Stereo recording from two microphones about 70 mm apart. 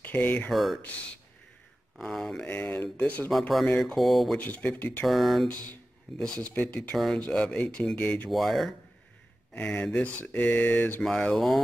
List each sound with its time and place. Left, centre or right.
0.0 s speech: left
0.5 s speech: centre
0.8 s speech: centre
2.0 s speech: centre; by 3.3 s left
3.3 s speech: centre
4.4 s speech: left
5.0 s speech: centre
6.1 s speech: centre
6.5 s speech: left
8.3 s speech: centre
9.5 s speech: centre
11.0 s speech: centre